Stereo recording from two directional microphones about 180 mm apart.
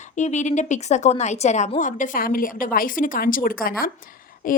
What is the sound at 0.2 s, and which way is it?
A woman's voice, 40° left (ahead or behind).